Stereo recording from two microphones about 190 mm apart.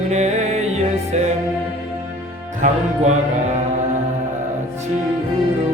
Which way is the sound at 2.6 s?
40° right (ahead or behind).